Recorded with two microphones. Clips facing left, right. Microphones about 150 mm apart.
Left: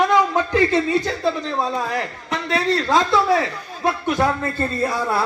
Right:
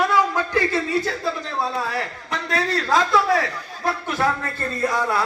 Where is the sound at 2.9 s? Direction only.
25° left (ahead or behind).